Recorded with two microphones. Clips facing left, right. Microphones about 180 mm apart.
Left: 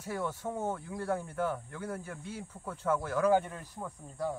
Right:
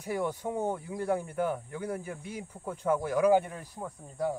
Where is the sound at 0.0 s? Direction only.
15° right (ahead or behind).